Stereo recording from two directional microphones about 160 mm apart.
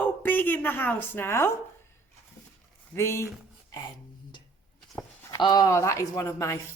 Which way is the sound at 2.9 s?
15° left (ahead or behind).